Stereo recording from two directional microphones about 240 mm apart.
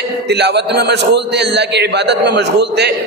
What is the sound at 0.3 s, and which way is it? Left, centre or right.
A man's voice, right.